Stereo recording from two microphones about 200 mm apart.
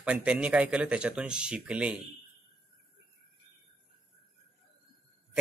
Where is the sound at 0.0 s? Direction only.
5° right (ahead or behind).